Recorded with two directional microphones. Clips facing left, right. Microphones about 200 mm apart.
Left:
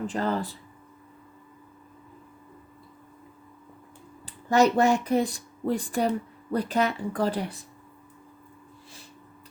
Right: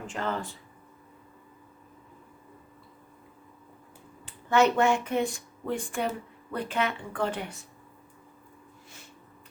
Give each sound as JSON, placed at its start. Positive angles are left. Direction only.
{"t": 0.1, "sound": "speech", "side_deg": 35}
{"t": 4.3, "sound": "speech", "side_deg": 35}